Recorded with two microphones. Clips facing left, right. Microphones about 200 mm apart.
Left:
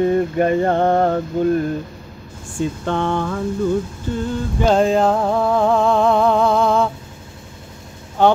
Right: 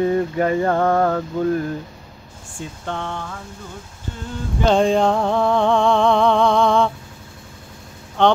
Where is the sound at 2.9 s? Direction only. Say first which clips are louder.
Left 6 dB; 60° left (ahead or behind).